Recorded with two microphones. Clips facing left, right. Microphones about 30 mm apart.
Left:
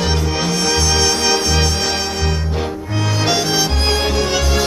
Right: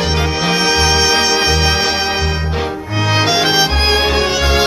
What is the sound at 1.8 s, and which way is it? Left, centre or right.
Music, right.